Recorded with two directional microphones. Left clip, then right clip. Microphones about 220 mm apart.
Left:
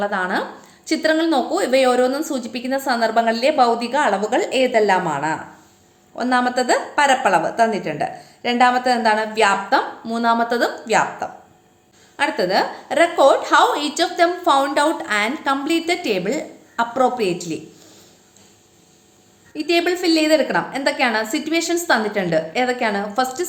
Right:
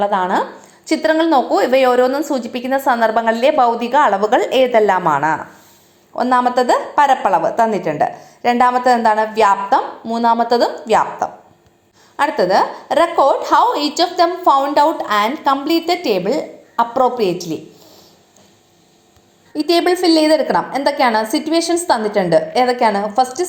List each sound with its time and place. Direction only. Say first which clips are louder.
0.0 s a woman's voice: right 5 dB; 10° right (ahead or behind)
19.5 s a woman's voice: right 4 dB; 20° right (ahead or behind)